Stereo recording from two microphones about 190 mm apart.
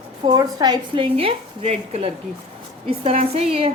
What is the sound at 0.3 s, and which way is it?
A woman's voice, 20° right (ahead or behind).